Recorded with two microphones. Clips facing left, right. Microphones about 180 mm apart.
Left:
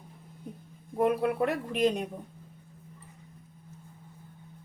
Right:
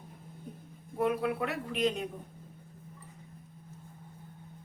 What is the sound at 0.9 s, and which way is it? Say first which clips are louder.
A man's voice: left 4 dB; 45° left (ahead or behind).